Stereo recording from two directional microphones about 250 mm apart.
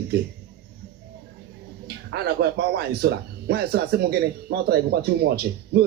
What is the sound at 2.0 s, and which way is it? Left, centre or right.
Speech, right.